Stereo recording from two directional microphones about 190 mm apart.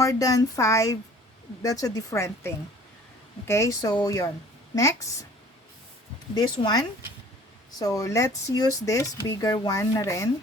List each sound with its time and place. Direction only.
0.0 s a woman's voice: 20° left (ahead or behind)
6.3 s speech: 20° left (ahead or behind)